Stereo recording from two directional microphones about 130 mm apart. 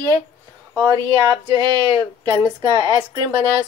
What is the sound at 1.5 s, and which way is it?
Speech, 30° right (ahead or behind).